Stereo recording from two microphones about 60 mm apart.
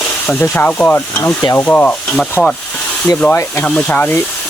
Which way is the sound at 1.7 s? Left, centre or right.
Left.